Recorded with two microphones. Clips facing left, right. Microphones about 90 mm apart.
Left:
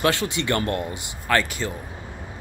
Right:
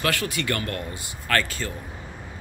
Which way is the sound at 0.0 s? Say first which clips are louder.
Left 3 dB; 25° left (ahead or behind).